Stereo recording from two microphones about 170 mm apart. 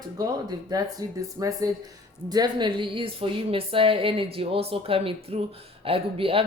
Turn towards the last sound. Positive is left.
turn(degrees=-35)  # may be behind; listen again after turning